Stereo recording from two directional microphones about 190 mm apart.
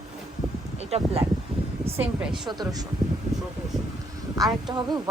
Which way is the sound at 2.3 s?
20° right (ahead or behind).